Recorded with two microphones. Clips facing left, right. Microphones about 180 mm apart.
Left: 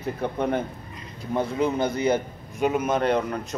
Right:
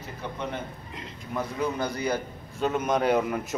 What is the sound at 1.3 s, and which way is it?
A man's voice, 25° left (ahead or behind).